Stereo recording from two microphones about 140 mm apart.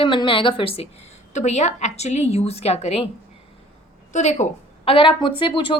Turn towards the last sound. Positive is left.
turn(degrees=35)  # may be behind; listen again after turning